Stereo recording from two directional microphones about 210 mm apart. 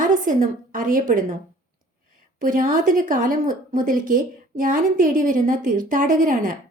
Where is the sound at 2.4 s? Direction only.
40° right (ahead or behind).